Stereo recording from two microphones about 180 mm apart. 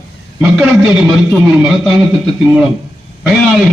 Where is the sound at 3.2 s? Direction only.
Centre (ahead or behind).